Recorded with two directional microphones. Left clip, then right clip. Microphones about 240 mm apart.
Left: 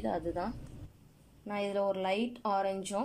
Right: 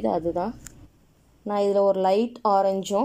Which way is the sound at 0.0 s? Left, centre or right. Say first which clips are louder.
Right 10 dB; right.